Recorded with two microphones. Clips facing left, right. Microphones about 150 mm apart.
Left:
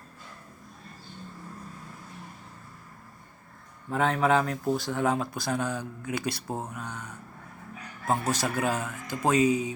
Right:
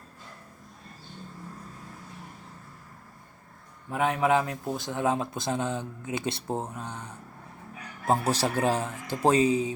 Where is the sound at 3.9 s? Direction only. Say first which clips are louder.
Even; 15° right (ahead or behind).